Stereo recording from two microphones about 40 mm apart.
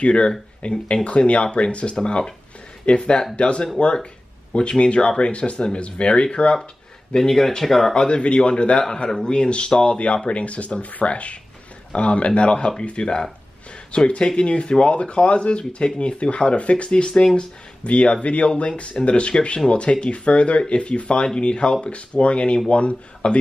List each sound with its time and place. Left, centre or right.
0.0 s speech: left
7.2 s speech: centre
7.9 s speech: left